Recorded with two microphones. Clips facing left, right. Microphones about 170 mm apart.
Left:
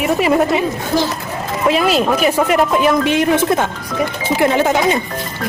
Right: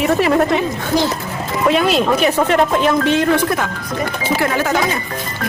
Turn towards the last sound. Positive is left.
turn(degrees=20)  # may be behind; listen again after turning